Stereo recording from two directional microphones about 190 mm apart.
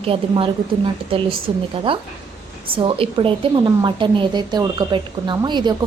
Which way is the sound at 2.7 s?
25° right (ahead or behind).